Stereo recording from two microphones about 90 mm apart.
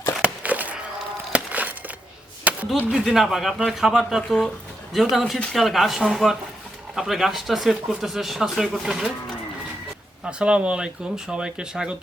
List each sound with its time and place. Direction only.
0.2 s a sound: 15° right (ahead or behind)
2.9 s speech: 5° right (ahead or behind)
10.2 s speech: 10° right (ahead or behind)